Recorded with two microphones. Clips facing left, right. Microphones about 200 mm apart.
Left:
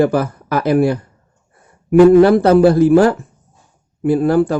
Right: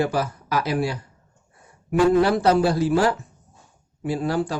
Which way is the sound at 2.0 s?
55° left (ahead or behind).